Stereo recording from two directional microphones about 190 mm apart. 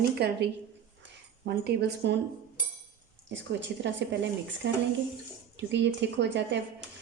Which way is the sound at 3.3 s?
70° right (ahead or behind).